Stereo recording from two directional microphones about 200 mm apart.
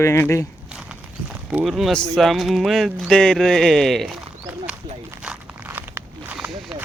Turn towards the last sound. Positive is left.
turn(degrees=-5)  # may be behind; listen again after turning